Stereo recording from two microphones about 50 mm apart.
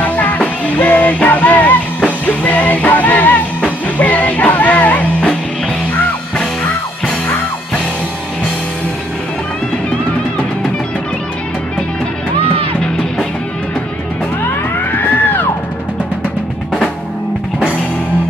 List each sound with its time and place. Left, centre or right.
0.0 s music: left
15.0 s music: left